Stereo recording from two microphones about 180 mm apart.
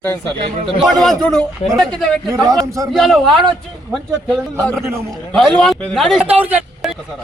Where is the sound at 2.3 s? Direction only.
20° right (ahead or behind).